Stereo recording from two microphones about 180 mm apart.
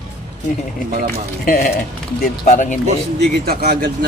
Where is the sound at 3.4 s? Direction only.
60° right (ahead or behind).